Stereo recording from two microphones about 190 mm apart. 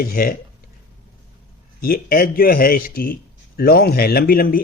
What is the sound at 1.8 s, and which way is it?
Speech, 50° left (ahead or behind).